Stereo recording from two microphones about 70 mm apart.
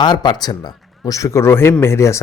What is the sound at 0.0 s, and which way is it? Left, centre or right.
A man's voice, left.